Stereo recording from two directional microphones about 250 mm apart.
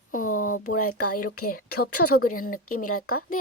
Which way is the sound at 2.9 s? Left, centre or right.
Left.